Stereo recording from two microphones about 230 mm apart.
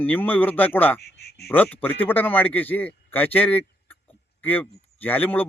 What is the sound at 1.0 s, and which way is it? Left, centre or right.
Speech, left.